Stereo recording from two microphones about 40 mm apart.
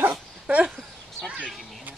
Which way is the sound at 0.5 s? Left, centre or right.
Right.